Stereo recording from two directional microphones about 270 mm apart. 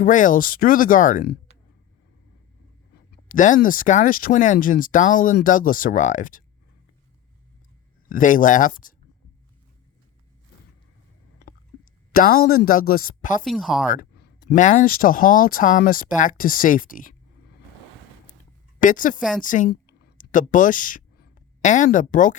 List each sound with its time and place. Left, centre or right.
0.0 s speech: left
2.9 s speech: left
8.1 s speech: left
12.1 s speech: left
13.4 s speech: centre
13.8 s speech: left
18.8 s speech: left